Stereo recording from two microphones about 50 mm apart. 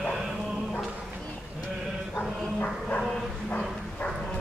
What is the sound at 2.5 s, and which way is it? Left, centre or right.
Music, left.